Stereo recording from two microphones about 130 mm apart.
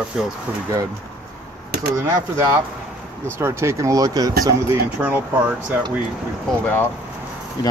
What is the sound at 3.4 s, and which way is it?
Speech, 20° right (ahead or behind).